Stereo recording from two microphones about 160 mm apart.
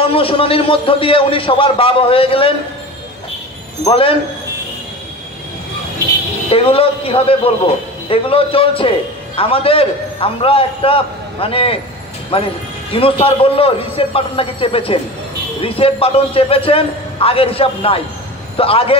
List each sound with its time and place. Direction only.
0.0 s a man's voice: 35° left (ahead or behind)
3.8 s a man's voice: 35° left (ahead or behind)
6.5 s a man's voice: 35° left (ahead or behind)